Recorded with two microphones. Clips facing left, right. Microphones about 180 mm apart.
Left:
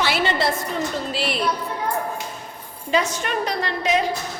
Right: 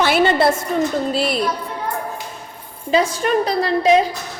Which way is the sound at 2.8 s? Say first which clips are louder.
Right 5 dB; 30° right (ahead or behind).